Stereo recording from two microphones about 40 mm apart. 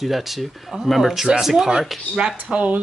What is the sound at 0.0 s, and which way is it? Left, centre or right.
Speech, centre.